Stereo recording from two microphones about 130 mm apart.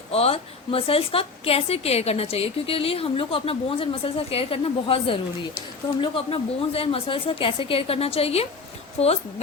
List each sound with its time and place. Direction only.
0.1 s a woman's voice: 50° left (ahead or behind)